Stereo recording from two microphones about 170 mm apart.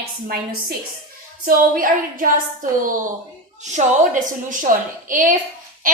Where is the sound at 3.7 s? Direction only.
50° right (ahead or behind).